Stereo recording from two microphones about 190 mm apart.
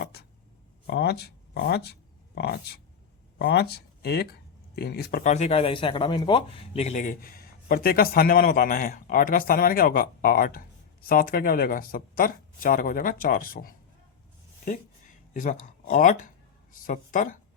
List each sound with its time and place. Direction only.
0.0 s a sound: 55° left (ahead or behind)
0.9 s speech: 60° left (ahead or behind)
5.2 s speech: 35° left (ahead or behind)
15.3 s speech: 45° left (ahead or behind)